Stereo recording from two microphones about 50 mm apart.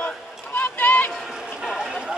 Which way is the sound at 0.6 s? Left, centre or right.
Left.